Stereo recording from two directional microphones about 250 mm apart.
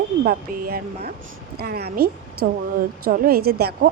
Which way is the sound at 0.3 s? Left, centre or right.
Right.